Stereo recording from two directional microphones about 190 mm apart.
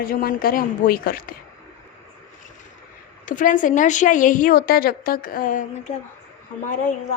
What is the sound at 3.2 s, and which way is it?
A woman's voice, 45° left (ahead or behind).